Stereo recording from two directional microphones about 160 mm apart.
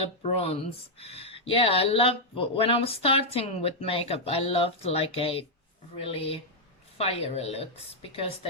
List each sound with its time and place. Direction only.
0.0 s speech: 40° left (ahead or behind)